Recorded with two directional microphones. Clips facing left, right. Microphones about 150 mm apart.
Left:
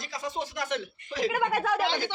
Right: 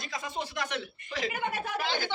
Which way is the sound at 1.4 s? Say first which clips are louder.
Left 6 dB; 90° left.